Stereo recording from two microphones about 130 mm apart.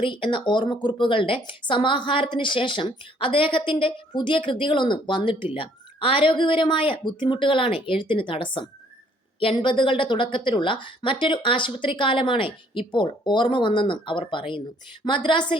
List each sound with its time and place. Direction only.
0.0 s speech: 40° left (ahead or behind)